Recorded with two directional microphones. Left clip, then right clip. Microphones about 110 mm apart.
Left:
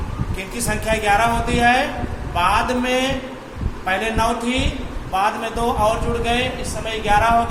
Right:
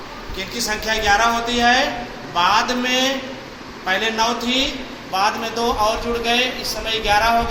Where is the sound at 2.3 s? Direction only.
40° left (ahead or behind).